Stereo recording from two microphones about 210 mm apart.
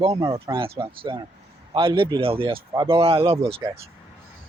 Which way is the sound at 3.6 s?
15° right (ahead or behind).